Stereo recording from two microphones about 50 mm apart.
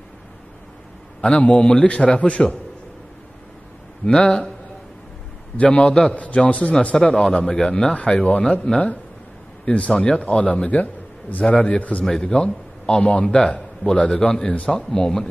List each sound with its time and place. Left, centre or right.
1.2 s a man's voice: left
4.0 s speech: centre
5.6 s a man's voice: left
8.7 s a man's voice: centre